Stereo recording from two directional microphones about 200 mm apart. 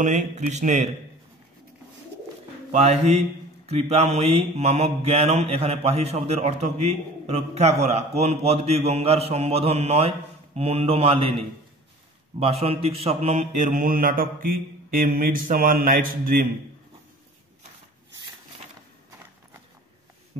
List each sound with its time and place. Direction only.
0.0 s mantra: 35° right (ahead or behind)
2.7 s mantra: 35° right (ahead or behind)